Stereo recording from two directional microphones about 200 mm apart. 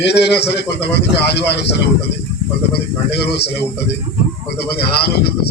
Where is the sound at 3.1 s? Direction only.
55° left (ahead or behind).